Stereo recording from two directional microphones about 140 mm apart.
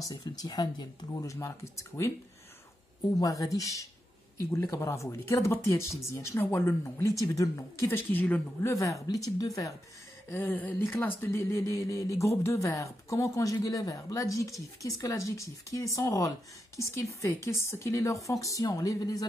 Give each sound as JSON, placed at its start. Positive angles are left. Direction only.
{"t": 0.1, "sound": "speech", "side_deg": 30}
{"t": 3.2, "sound": "speech", "side_deg": 25}
{"t": 8.7, "sound": "speech", "side_deg": 25}
{"t": 10.3, "sound": "speech", "side_deg": 10}